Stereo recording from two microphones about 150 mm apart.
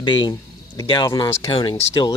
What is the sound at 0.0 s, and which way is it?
Speech, 30° left (ahead or behind).